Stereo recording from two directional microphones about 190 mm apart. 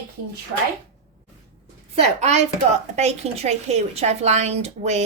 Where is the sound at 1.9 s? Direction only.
35° right (ahead or behind).